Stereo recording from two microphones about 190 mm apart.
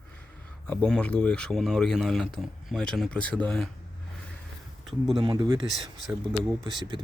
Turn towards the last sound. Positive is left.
turn(degrees=-25)  # may be behind; listen again after turning